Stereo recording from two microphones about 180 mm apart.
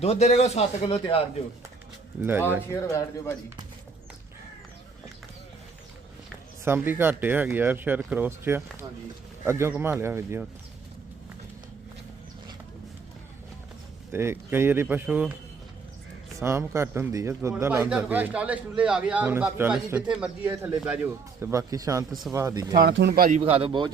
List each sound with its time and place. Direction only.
0.0 s speech: 35° left (ahead or behind)
2.8 s speech: 15° left (ahead or behind)
6.7 s a man's voice: 10° right (ahead or behind)
14.1 s a man's voice: 15° right (ahead or behind)
16.4 s a man's voice: 15° right (ahead or behind)
22.7 s speech: 70° right (ahead or behind)
23.4 s speech: 30° right (ahead or behind)